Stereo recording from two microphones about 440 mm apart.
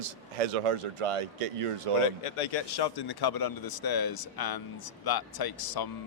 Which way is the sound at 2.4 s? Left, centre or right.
Left.